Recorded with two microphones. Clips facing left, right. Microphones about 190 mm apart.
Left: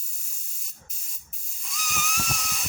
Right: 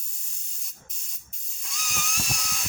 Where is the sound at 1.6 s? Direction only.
Centre (ahead or behind).